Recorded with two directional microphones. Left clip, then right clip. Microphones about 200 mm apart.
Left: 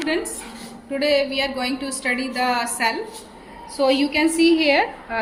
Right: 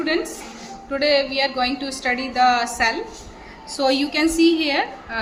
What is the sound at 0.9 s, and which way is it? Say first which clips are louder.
A woman's voice: right 1 dB; 15° right (ahead or behind).